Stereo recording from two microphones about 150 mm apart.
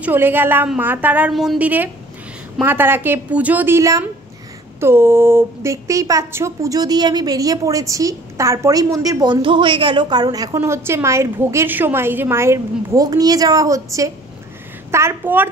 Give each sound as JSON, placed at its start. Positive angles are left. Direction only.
{"t": 0.0, "sound": "a woman's voice", "side_deg": -15}